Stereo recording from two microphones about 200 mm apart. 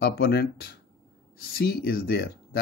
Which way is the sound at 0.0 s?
55° left (ahead or behind).